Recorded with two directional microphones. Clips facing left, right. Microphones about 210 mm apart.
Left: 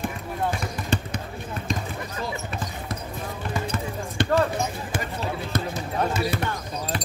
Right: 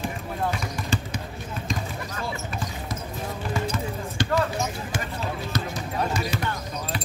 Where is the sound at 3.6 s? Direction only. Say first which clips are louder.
Even; 55° left (ahead or behind).